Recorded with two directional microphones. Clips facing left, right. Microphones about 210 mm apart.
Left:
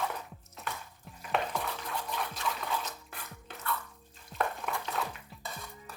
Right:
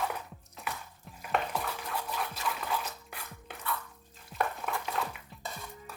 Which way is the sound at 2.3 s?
10° right (ahead or behind).